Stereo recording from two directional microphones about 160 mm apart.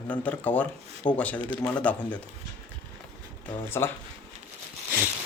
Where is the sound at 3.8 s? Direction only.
20° left (ahead or behind).